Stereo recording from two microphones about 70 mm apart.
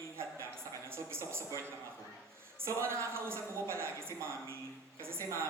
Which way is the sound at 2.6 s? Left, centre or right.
Right.